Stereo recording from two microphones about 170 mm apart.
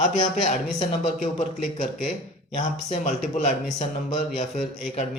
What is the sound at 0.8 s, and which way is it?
Speech, 45° left (ahead or behind).